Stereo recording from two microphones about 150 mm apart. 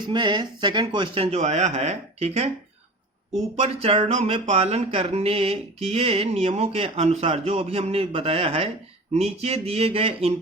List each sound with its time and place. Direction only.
0.1 s speech: 30° right (ahead or behind)
3.5 s speech: 45° right (ahead or behind)